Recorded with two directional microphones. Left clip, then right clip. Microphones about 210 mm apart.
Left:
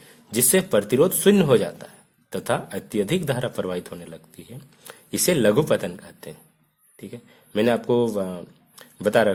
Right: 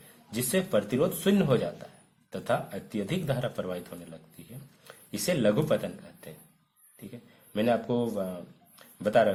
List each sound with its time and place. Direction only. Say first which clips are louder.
0.3 s a man's voice: left 8 dB; 50° left (ahead or behind)